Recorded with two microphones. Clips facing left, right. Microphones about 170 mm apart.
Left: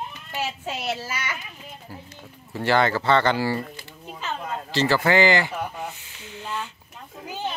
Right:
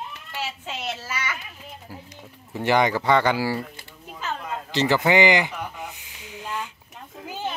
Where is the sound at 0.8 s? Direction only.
30° left (ahead or behind).